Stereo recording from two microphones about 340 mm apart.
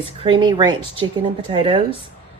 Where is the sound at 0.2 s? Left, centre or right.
Centre.